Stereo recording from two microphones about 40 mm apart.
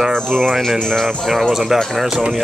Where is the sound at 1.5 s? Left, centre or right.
Centre.